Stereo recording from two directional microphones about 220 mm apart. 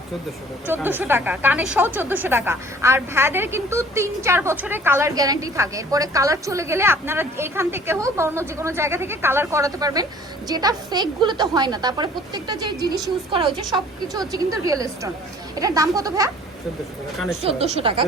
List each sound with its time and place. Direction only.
0.7 s a woman's voice: 10° right (ahead or behind)
17.4 s a woman's voice: 25° right (ahead or behind)